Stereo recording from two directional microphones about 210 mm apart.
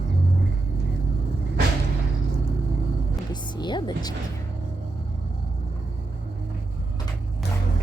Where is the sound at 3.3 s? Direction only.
20° left (ahead or behind).